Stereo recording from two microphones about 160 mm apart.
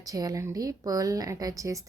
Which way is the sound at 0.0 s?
20° right (ahead or behind).